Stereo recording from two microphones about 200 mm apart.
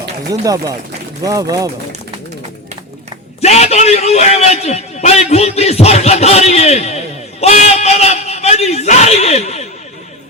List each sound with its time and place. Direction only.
0.3 s speech: 20° right (ahead or behind)
3.4 s a man's voice: 35° left (ahead or behind)